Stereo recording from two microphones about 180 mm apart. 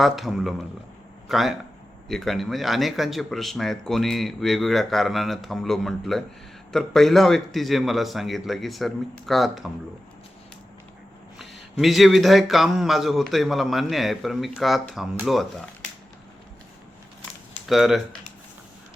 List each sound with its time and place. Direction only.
0.0 s speech: centre (ahead or behind)
11.3 s speech: centre (ahead or behind)
17.7 s speech: centre (ahead or behind)